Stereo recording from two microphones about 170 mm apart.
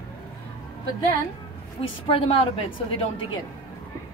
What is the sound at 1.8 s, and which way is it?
Speech, 35° left (ahead or behind).